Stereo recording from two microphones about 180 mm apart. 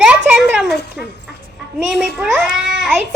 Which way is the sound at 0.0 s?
5° right (ahead or behind).